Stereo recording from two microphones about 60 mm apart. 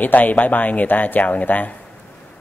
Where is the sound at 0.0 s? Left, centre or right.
Left.